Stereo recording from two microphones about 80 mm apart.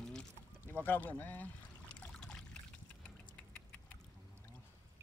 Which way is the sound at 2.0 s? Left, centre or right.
Centre.